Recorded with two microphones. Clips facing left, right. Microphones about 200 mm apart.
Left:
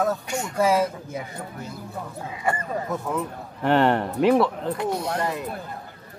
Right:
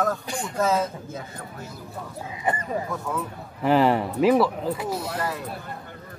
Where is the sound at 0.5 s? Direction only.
10° left (ahead or behind).